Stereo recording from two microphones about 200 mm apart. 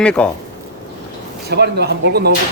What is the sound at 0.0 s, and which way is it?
Speech, 5° left (ahead or behind).